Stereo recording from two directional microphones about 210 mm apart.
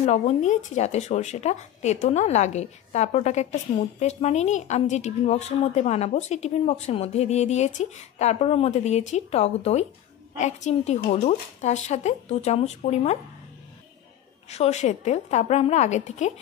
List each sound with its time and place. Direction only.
0.0 s speech: 30° left (ahead or behind)
14.5 s speech: 30° left (ahead or behind)